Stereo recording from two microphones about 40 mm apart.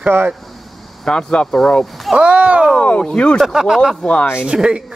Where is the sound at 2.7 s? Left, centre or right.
Left.